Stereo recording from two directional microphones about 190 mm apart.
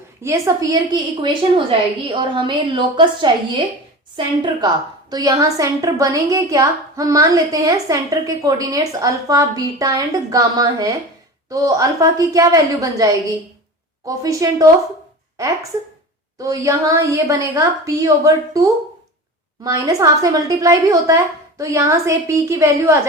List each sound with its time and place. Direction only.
0.2 s a woman's voice: 15° right (ahead or behind)
5.1 s a woman's voice: 20° right (ahead or behind)
16.4 s a woman's voice: 15° right (ahead or behind)